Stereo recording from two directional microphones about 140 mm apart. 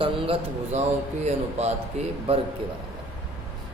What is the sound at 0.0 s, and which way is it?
A man's voice, 40° right (ahead or behind).